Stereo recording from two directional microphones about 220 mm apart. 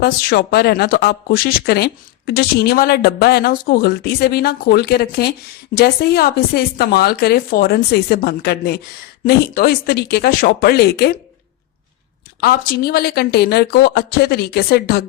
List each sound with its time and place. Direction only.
0.0 s speech: 45° left (ahead or behind)
12.4 s speech: 45° left (ahead or behind)